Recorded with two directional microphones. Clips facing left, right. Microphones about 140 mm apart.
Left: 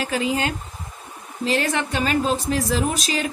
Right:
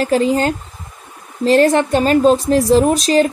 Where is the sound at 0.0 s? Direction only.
40° right (ahead or behind).